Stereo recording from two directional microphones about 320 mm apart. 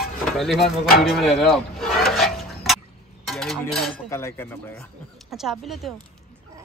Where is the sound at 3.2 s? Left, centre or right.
Centre.